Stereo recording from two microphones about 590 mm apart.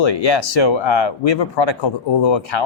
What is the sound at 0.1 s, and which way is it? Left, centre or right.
Speech, left.